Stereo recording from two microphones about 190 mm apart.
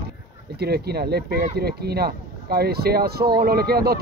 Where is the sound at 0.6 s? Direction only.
55° right (ahead or behind).